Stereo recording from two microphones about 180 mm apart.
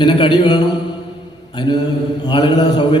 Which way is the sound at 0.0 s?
25° left (ahead or behind).